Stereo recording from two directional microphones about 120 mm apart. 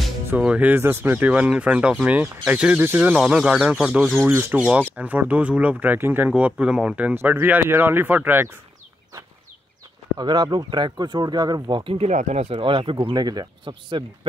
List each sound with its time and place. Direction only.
0.4 s speech: 10° right (ahead or behind)
4.3 s speech: 20° right (ahead or behind)
10.1 s speech: 40° right (ahead or behind)
12.1 s speech: 70° right (ahead or behind)
12.5 s speech: 45° right (ahead or behind)
13.1 s speech: 35° right (ahead or behind)